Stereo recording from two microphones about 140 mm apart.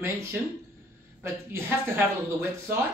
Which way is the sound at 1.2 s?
15° right (ahead or behind).